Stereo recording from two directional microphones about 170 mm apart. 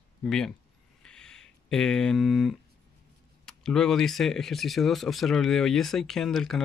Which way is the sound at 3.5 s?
5° left (ahead or behind).